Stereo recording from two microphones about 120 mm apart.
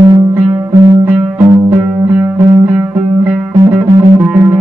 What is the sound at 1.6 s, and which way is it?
Music, 20° right (ahead or behind).